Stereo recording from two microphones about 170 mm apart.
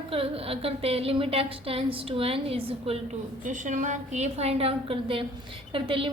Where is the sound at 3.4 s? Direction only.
50° right (ahead or behind); by 6.0 s 30° right (ahead or behind).